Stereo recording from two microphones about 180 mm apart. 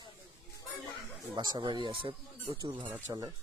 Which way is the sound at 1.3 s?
25° right (ahead or behind).